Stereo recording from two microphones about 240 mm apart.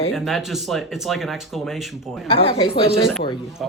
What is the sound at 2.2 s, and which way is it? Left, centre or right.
Speech, left.